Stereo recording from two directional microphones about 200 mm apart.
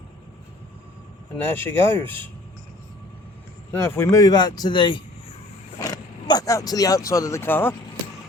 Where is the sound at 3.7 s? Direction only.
10° left (ahead or behind).